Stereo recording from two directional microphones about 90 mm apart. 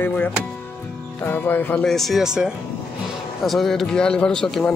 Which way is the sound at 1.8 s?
5° left (ahead or behind).